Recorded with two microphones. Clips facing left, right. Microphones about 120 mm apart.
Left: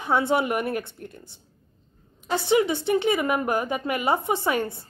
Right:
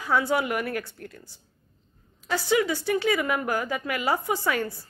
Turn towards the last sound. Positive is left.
turn(degrees=25)  # may be behind; listen again after turning